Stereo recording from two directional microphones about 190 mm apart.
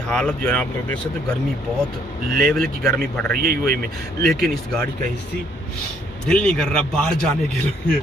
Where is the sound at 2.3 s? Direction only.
50° right (ahead or behind).